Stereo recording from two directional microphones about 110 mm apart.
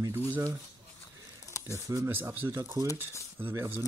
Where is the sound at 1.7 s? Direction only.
30° right (ahead or behind).